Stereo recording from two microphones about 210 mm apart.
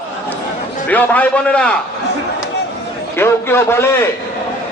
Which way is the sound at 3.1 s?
10° left (ahead or behind).